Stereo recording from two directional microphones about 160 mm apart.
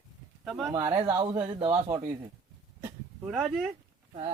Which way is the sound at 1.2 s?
35° right (ahead or behind).